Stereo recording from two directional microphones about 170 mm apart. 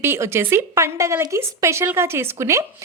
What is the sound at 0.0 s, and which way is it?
A woman's voice, 15° right (ahead or behind).